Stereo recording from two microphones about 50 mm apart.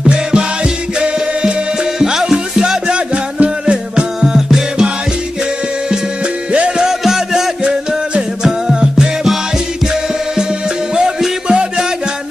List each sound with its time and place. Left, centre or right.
0.1 s music: centre
2.0 s music: centre
6.8 s music: centre
7.6 s music: right
8.5 s music: centre
11.0 s music: centre